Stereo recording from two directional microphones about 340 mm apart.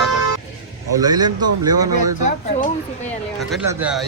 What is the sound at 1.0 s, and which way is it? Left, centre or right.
Speech, centre.